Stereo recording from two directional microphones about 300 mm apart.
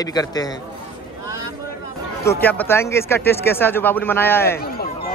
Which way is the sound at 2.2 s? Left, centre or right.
Centre.